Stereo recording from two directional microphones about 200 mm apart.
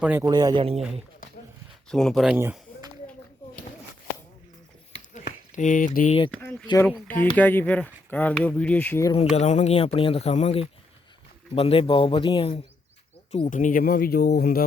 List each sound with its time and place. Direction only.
0.0 s speech: 10° right (ahead or behind)
0.3 s speech: 20° right (ahead or behind)
1.9 s speech: 5° left (ahead or behind)
5.1 s a sound: 40° left (ahead or behind)
6.3 s speech: 5° left (ahead or behind)
9.1 s speech: 35° left (ahead or behind)
13.3 s speech: 35° left (ahead or behind)